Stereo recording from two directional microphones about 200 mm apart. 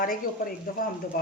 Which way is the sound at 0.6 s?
50° left (ahead or behind).